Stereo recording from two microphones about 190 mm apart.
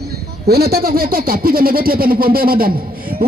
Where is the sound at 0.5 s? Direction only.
55° right (ahead or behind).